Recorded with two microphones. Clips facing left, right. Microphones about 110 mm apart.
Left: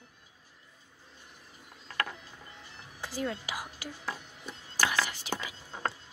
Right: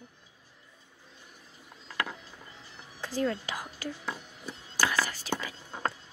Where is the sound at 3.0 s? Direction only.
15° left (ahead or behind).